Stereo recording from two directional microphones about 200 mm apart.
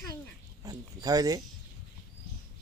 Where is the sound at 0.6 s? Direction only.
20° right (ahead or behind).